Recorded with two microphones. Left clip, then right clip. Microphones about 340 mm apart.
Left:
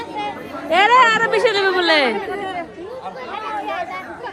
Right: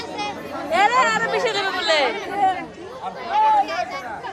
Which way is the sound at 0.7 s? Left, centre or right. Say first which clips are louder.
Left 5 dB; centre.